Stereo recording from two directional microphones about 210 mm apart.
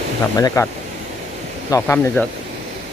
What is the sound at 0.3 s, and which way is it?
Speech, 15° left (ahead or behind).